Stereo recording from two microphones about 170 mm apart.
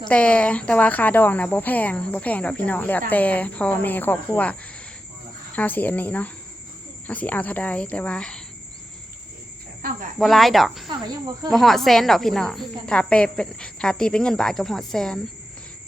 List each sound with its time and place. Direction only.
0.1 s speech: 5° left (ahead or behind)
5.5 s speech: 10° left (ahead or behind)
9.8 s speech: 55° right (ahead or behind)
10.2 s speech: centre (ahead or behind)
10.8 s cricket: 25° right (ahead or behind)
11.5 s speech: centre (ahead or behind)